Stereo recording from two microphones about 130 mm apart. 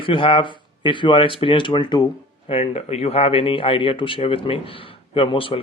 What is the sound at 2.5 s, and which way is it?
Speech, 50° left (ahead or behind).